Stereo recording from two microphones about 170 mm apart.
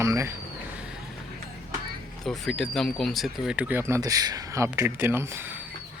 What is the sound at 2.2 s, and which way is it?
Speech, centre (ahead or behind).